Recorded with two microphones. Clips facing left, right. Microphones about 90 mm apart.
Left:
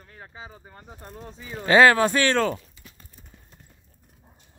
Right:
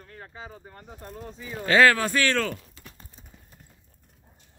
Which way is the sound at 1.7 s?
20° left (ahead or behind).